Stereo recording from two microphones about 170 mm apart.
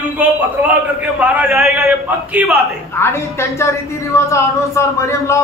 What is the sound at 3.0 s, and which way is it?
A man's voice, 15° left (ahead or behind).